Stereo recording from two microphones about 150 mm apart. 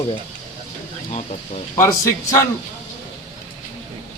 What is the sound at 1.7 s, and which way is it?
Speech, 20° left (ahead or behind).